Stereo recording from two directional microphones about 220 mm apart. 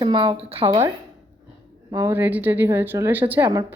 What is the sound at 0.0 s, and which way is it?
Speech, 20° right (ahead or behind).